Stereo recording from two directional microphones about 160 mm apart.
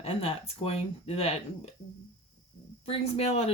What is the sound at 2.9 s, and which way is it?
Speech, 40° left (ahead or behind).